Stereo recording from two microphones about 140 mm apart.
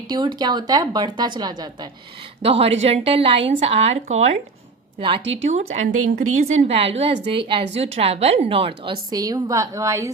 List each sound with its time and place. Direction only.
0.1 s a woman's voice: 30° right (ahead or behind)
2.4 s a woman's voice: 45° right (ahead or behind); by 10.1 s 20° right (ahead or behind)